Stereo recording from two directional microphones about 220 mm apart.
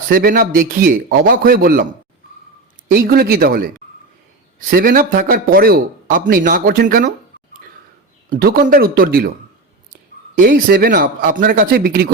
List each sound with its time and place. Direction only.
0.1 s speech: 40° right (ahead or behind)
2.9 s speech: 45° right (ahead or behind)
4.7 s speech: 40° right (ahead or behind)
8.4 s speech: 45° right (ahead or behind)
10.3 s speech: 40° right (ahead or behind)